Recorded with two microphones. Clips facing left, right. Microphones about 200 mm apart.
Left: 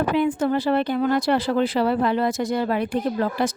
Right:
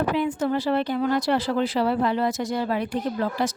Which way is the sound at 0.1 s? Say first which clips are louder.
Left 3 dB; 55° left (ahead or behind).